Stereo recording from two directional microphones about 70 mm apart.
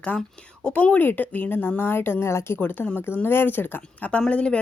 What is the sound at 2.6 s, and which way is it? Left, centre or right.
Speech, left.